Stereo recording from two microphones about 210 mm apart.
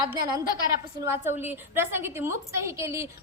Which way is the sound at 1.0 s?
10° right (ahead or behind).